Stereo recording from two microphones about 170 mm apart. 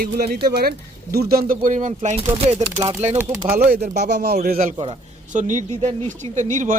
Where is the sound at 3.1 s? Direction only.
15° right (ahead or behind).